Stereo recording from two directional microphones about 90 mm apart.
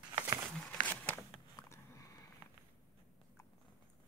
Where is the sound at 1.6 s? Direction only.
30° left (ahead or behind).